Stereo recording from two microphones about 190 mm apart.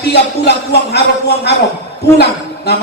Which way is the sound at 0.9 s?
60° left (ahead or behind).